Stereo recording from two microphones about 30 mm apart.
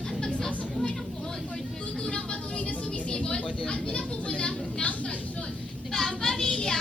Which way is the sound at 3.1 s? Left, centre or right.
Left.